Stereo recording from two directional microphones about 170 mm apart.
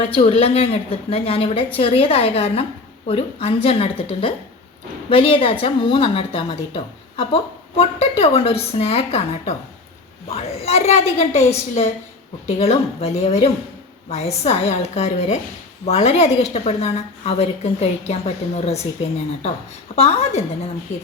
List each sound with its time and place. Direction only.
0.1 s a woman's voice: 35° left (ahead or behind)
20.0 s a woman's voice: 35° left (ahead or behind)